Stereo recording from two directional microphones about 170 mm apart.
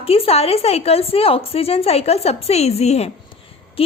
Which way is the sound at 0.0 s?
35° left (ahead or behind).